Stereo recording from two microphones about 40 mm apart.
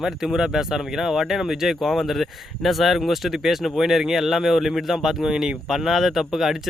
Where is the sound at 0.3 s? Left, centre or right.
Centre.